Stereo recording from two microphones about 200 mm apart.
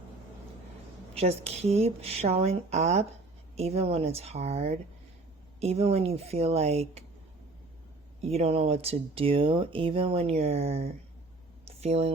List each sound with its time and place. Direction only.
1.1 s speech: 30° right (ahead or behind)
8.2 s speech: 30° right (ahead or behind)